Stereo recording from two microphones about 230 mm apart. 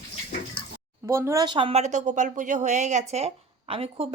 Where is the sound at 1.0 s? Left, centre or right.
Centre.